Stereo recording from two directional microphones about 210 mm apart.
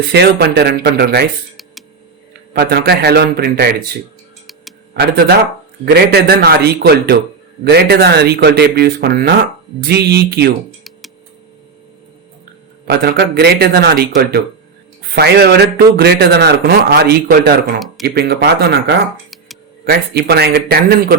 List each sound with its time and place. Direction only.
0.1 s speech: 50° right (ahead or behind)
2.5 s speech: 50° right (ahead or behind)
4.9 s speech: 50° right (ahead or behind)
12.9 s speech: 50° right (ahead or behind)
17.7 s speech: centre (ahead or behind)
18.0 s speech: 50° right (ahead or behind)